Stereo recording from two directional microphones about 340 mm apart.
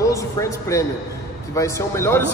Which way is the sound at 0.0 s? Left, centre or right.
Centre.